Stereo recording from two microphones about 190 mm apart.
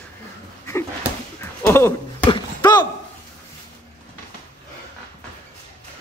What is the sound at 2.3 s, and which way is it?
Basketball bounce, 20° left (ahead or behind).